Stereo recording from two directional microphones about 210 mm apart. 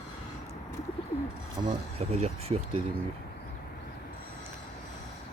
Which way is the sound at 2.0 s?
30° right (ahead or behind).